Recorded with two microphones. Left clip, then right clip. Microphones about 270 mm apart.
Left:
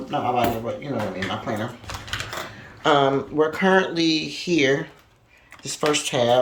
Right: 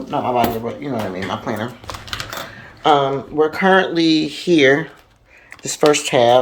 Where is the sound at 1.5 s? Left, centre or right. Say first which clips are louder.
Right 4 dB; centre.